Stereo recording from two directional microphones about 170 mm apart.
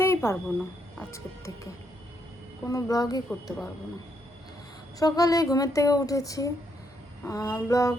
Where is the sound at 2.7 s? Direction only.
20° left (ahead or behind).